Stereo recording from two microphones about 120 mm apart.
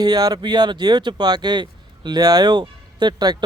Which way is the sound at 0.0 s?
35° right (ahead or behind).